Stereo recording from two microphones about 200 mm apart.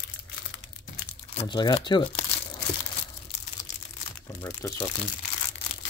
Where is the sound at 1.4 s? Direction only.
20° left (ahead or behind).